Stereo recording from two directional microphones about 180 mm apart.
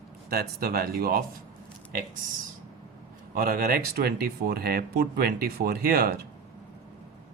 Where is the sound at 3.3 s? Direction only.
55° right (ahead or behind).